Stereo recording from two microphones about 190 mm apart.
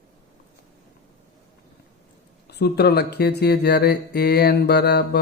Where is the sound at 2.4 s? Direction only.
60° left (ahead or behind).